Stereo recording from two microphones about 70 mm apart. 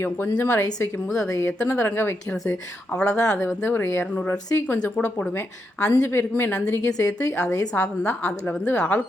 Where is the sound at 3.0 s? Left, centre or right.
Centre.